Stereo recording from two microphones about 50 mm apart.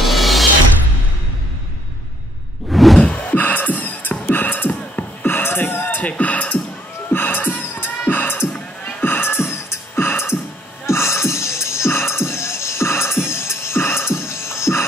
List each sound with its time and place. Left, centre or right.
0.0 s music: centre
2.7 s whoosh: centre
3.0 s beatboxing: left
5.2 s a sound: left
5.9 s beatboxing: left
7.1 s a sound: left
8.1 s music: left
8.8 s beatboxing: left
10.9 s music: left